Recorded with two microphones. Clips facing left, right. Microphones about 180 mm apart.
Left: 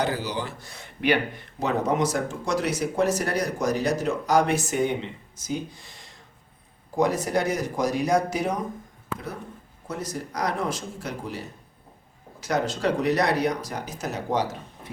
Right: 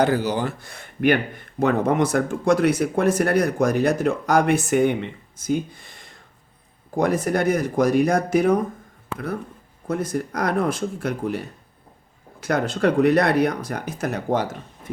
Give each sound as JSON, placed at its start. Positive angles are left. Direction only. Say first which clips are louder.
{"t": 0.0, "sound": "speech", "louder": "right 7 dB", "side_deg": -50}
{"t": 9.8, "sound": "speech", "louder": "right 8 dB", "side_deg": -55}